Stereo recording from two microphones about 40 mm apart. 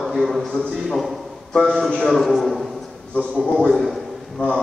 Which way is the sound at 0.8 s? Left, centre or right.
Centre.